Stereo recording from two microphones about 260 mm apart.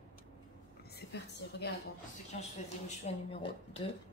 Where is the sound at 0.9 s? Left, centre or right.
Left.